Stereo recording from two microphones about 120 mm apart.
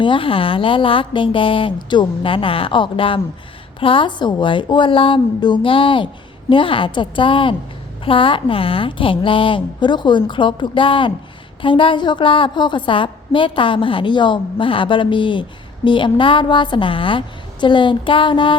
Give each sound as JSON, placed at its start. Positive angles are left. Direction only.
{"t": 0.0, "sound": "a woman's voice", "side_deg": 45}